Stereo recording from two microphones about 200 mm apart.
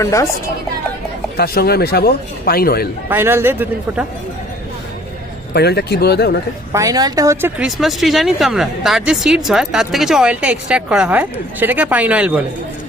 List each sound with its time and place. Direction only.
0.0 s speech: 15° left (ahead or behind)
1.4 s a man's voice: 50° left (ahead or behind)
3.1 s a man's voice: 10° right (ahead or behind)
5.5 s a man's voice: 55° left (ahead or behind)
6.7 s a man's voice: 15° right (ahead or behind)
7.8 s speech: centre (ahead or behind)